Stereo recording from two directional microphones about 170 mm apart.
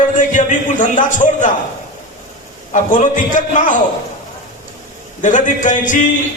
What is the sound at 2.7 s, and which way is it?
A man's voice, 50° left (ahead or behind).